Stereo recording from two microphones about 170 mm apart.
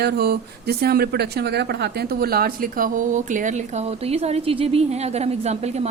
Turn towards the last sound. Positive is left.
turn(degrees=-40)  # may be behind; listen again after turning